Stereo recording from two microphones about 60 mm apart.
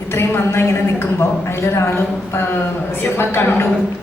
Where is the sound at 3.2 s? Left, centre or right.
Left.